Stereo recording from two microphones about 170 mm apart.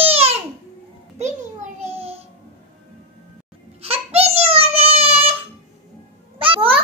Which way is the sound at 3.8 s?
35° right (ahead or behind).